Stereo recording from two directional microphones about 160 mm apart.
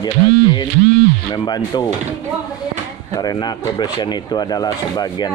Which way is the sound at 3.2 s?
25° left (ahead or behind).